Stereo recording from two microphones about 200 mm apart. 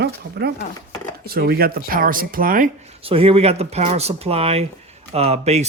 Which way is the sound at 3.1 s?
30° right (ahead or behind).